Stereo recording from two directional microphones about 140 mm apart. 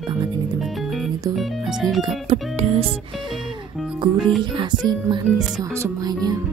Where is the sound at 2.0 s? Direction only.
40° right (ahead or behind).